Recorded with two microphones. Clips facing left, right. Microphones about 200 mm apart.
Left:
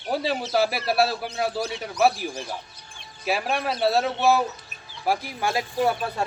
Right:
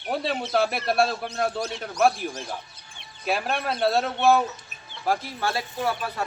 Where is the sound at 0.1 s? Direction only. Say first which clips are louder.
Left 1 dB; centre (ahead or behind).